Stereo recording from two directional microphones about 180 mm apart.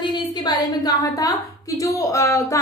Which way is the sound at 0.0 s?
25° left (ahead or behind).